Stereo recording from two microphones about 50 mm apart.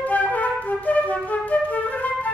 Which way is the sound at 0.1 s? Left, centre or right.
Left.